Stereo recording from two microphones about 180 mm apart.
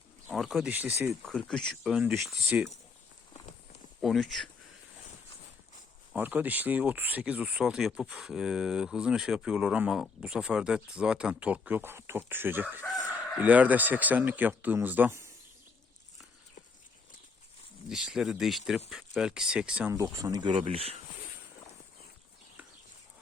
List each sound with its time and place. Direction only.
0.3 s speech: centre (ahead or behind)
1.3 s speech: 5° left (ahead or behind)
4.0 s speech: centre (ahead or behind)
6.1 s speech: 10° right (ahead or behind)
17.8 s speech: centre (ahead or behind)
19.9 s speech: 20° right (ahead or behind)